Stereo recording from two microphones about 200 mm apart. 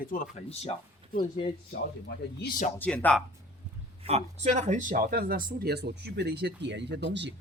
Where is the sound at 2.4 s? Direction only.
45° left (ahead or behind).